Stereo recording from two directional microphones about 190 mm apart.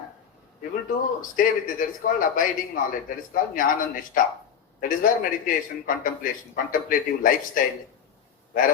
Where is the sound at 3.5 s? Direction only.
45° left (ahead or behind).